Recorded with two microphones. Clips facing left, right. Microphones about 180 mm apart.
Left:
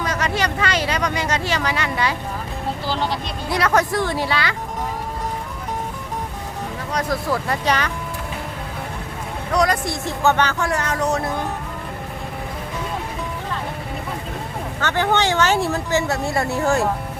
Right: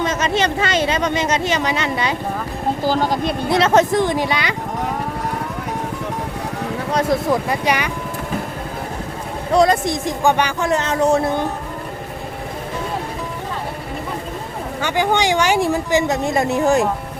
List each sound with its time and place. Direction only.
0.0 s speech: 20° right (ahead or behind)
2.8 s speech: 45° right (ahead or behind)
3.5 s speech: 25° right (ahead or behind)
6.9 s speech: 25° right (ahead or behind)
7.4 s speech: 10° right (ahead or behind)
9.5 s speech: 25° right (ahead or behind)
14.8 s speech: 10° right (ahead or behind)